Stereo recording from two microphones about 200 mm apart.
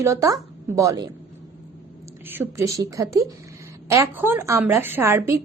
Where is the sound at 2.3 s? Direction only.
10° right (ahead or behind).